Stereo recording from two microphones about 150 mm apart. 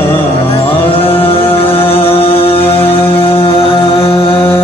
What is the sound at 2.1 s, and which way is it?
Mantra, 40° left (ahead or behind).